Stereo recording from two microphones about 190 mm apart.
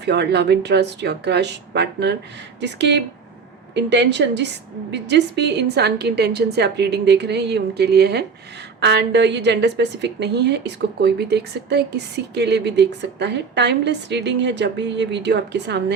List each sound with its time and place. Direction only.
0.0 s a woman's voice: 65° right (ahead or behind)